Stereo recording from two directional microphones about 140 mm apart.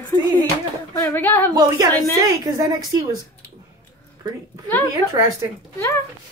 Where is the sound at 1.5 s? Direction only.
25° right (ahead or behind).